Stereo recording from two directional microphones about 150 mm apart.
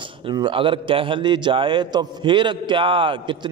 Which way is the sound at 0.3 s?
35° right (ahead or behind).